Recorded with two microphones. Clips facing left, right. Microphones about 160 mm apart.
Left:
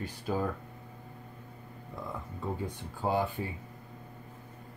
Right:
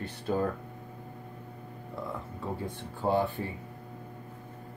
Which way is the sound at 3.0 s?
10° left (ahead or behind).